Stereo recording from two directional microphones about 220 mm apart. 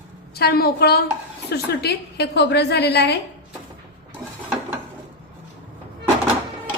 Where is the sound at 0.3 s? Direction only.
45° left (ahead or behind).